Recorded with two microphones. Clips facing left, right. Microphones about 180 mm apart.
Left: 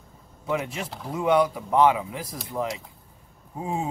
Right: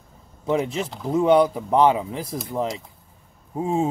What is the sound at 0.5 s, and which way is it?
Speech, 30° right (ahead or behind).